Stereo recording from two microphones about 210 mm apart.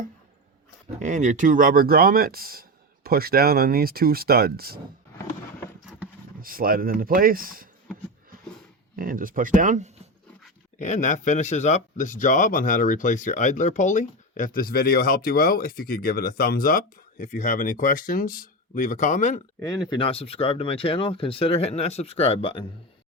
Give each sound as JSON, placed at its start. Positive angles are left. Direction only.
{"t": 0.9, "sound": "speech", "side_deg": -35}
{"t": 6.4, "sound": "speech", "side_deg": -45}
{"t": 9.0, "sound": "speech", "side_deg": -40}
{"t": 10.8, "sound": "speech", "side_deg": 35}
{"t": 19.6, "sound": "speech", "side_deg": 20}